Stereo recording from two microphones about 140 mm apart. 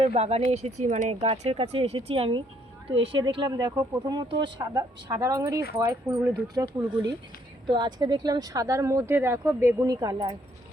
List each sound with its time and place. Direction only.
0.0 s speech: 45° right (ahead or behind)
1.1 s speech: 45° right (ahead or behind)